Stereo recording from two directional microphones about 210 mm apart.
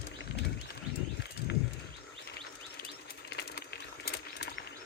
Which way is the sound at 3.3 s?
50° left (ahead or behind).